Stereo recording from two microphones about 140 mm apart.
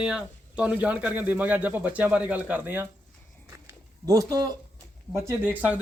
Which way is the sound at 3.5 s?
25° right (ahead or behind).